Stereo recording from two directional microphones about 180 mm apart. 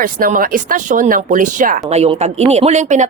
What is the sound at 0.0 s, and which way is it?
Speech, 50° right (ahead or behind).